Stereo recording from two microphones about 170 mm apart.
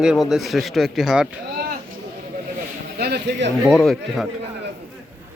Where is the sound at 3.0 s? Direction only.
70° right (ahead or behind).